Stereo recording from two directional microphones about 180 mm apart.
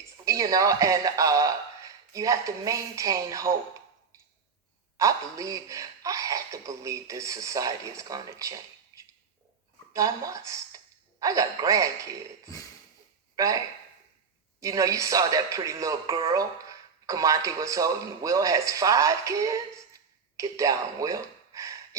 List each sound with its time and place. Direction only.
0.0 s speech: 20° right (ahead or behind)
8.9 s a sound: 15° right (ahead or behind)
9.9 s speech: 20° right (ahead or behind)
13.3 s speech: 20° right (ahead or behind)
14.6 s speech: 20° right (ahead or behind)